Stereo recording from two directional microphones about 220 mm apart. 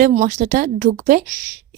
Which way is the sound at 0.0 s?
35° right (ahead or behind).